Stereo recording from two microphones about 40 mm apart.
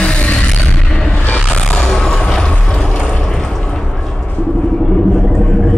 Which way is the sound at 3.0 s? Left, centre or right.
Left.